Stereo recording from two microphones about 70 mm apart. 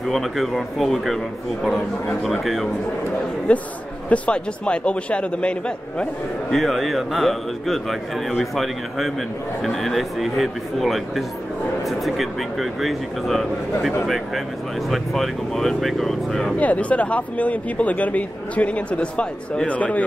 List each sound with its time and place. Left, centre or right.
0.0 s a man's voice: centre
3.5 s a man's voice: centre
6.5 s a man's voice: centre
16.5 s speech: left